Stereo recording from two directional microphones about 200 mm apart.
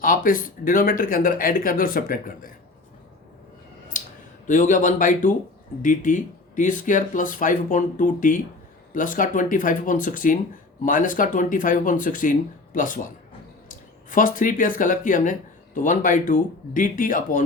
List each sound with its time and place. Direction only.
0.0 s speech: 45° left (ahead or behind)
3.9 s a sound: 40° left (ahead or behind)
4.4 s speech: 40° left (ahead or behind)